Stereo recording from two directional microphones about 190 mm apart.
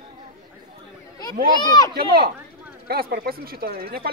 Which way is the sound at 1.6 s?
20° left (ahead or behind).